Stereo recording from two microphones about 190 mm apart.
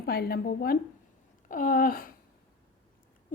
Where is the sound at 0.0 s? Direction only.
55° left (ahead or behind).